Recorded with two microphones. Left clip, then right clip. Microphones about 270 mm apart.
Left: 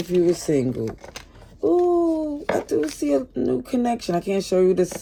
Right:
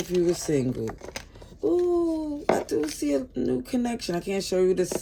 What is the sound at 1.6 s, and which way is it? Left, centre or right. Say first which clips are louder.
A child's voice: left 5 dB; centre.